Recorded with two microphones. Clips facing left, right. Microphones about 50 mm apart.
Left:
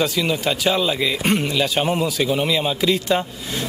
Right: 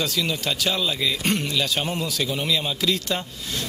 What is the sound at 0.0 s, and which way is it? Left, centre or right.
A man's voice, centre.